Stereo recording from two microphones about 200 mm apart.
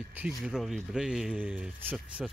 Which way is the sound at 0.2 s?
Centre (ahead or behind).